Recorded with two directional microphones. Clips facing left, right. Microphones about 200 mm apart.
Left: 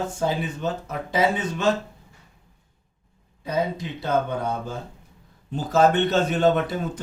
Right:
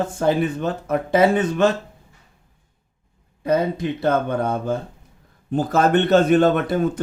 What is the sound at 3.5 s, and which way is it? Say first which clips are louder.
Speech: right 6 dB; 55° right (ahead or behind).